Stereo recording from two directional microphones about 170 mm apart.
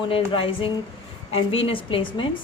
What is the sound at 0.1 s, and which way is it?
A woman's voice, 30° left (ahead or behind).